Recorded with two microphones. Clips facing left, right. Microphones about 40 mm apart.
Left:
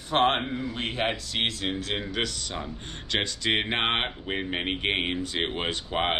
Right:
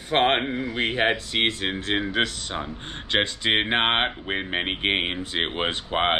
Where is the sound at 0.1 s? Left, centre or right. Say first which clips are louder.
Right 2 dB; right.